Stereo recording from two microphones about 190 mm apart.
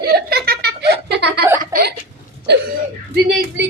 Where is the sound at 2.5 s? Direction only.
65° right (ahead or behind).